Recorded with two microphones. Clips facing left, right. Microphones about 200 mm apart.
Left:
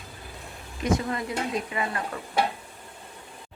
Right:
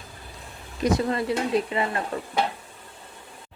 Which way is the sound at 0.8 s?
35° right (ahead or behind).